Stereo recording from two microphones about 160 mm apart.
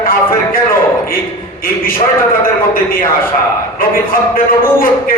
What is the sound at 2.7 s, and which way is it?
Speech, 65° left (ahead or behind).